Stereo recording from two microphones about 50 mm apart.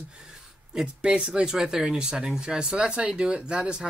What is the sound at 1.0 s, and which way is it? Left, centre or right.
Speech, centre.